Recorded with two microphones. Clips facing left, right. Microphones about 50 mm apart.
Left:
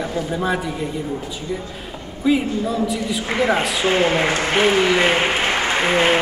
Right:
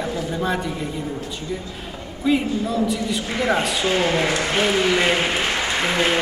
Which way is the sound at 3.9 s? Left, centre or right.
Left.